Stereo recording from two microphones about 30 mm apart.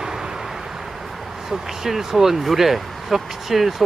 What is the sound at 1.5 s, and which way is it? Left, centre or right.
Speech, centre.